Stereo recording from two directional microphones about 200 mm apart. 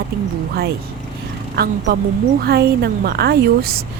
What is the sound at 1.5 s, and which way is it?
Speech, 55° right (ahead or behind).